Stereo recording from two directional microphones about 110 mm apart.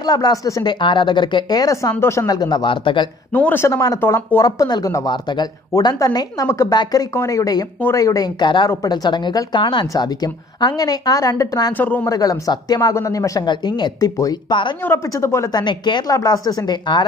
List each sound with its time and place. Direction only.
0.0 s a woman's voice: 35° left (ahead or behind)
0.7 s speech: 45° left (ahead or behind)
3.3 s speech: 15° left (ahead or behind)
3.6 s a woman's voice: 30° left (ahead or behind)
4.0 s speech: 20° left (ahead or behind)
4.4 s a woman's voice: 35° left (ahead or behind)
11.7 s speech: 15° left (ahead or behind)
12.1 s a woman's voice: 35° left (ahead or behind)
15.5 s a woman's voice: 45° left (ahead or behind)